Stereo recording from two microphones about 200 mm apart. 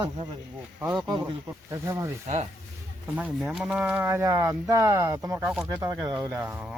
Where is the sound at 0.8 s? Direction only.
5° right (ahead or behind).